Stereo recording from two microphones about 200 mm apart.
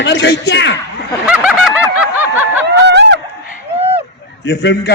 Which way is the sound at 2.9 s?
60° right (ahead or behind).